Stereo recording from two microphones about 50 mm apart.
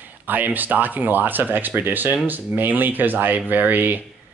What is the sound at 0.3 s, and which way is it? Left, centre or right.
Speech, right.